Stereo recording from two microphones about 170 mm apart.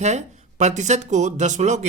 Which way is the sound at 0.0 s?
40° right (ahead or behind).